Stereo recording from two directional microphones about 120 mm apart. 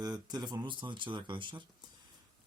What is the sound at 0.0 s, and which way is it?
Speech, 35° right (ahead or behind).